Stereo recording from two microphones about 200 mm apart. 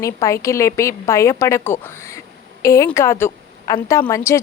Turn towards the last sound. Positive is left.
turn(degrees=15)  # may be behind; listen again after turning